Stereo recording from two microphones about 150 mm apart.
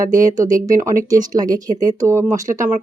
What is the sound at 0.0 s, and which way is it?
Speech, 20° right (ahead or behind).